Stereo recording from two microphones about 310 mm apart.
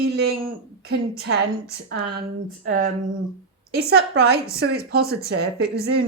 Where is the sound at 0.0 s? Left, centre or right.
Right.